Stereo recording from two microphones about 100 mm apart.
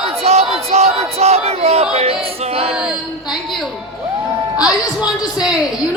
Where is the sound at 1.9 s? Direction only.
80° right.